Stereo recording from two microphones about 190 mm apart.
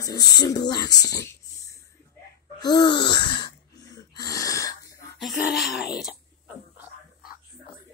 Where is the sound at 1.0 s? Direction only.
15° left (ahead or behind).